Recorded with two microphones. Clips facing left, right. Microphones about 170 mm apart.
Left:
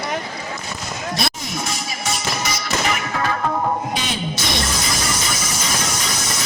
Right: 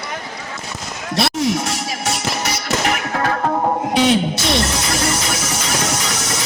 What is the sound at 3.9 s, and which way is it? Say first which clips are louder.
Music: right 10 dB; 65° right (ahead or behind).